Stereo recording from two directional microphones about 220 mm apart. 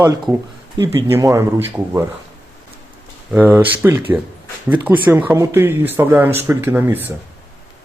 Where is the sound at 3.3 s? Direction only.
10° right (ahead or behind).